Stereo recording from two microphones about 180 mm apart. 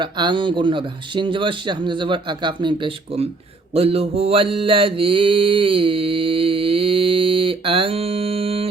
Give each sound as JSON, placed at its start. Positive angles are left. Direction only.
{"t": 0.0, "sound": "speech", "side_deg": -25}
{"t": 3.8, "sound": "mantra", "side_deg": -35}